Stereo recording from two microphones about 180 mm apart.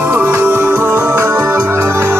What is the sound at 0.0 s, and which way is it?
Music, 10° right (ahead or behind).